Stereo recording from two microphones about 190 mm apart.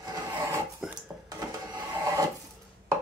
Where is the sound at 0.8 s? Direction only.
5° right (ahead or behind).